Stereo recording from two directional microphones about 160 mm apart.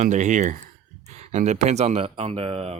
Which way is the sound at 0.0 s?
50° right (ahead or behind).